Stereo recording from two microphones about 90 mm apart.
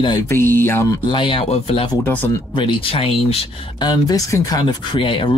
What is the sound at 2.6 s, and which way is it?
Speech, 80° left.